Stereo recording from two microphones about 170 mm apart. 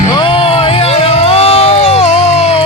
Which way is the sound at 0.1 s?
30° left (ahead or behind).